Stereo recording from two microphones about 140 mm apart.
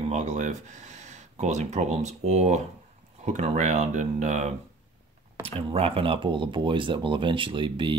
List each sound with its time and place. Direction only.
0.1 s speech: 55° right (ahead or behind)
5.6 s speech: 40° right (ahead or behind)